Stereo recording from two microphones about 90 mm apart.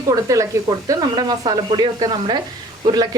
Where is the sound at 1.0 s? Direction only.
55° right (ahead or behind).